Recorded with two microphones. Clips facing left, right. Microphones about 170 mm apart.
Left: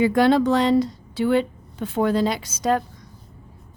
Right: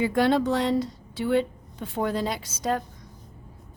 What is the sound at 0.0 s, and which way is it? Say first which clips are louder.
A woman's voice: left 5 dB; 90° left.